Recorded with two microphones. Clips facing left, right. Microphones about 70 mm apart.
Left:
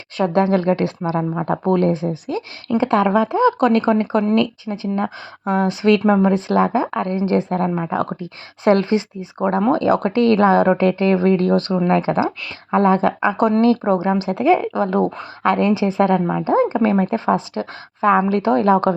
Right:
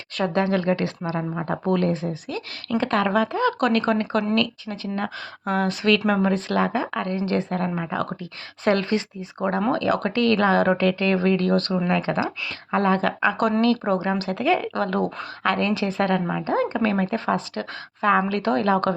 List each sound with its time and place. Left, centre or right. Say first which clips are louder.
0.2 s speech: left 5 dB; left